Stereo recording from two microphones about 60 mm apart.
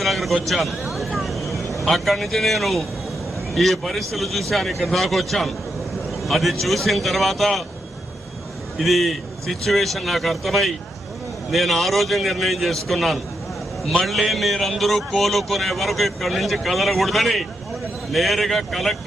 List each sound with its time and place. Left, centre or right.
0.0 s a sound: centre
0.4 s a man's voice: centre
0.9 s vehicle: centre
1.8 s a man's voice: centre
8.8 s a man's voice: centre